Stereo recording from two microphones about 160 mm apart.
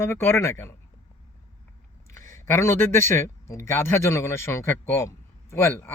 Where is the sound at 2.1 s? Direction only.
15° left (ahead or behind).